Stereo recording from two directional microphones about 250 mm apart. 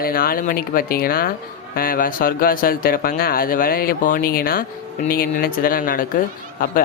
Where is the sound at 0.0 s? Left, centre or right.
Left.